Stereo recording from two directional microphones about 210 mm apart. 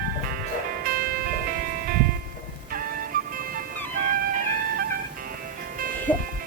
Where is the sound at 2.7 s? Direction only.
45° right (ahead or behind).